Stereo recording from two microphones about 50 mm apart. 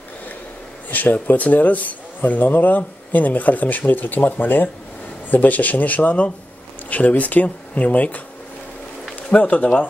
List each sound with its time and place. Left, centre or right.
0.8 s a man's voice: left